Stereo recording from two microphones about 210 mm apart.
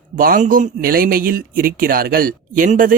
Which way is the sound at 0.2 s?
40° right (ahead or behind).